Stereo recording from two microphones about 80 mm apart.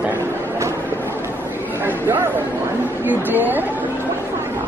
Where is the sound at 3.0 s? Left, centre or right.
Right.